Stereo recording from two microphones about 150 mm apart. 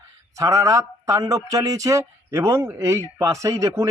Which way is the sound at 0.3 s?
20° right (ahead or behind).